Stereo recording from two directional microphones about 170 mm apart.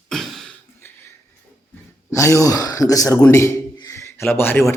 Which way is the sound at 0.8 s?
15° left (ahead or behind).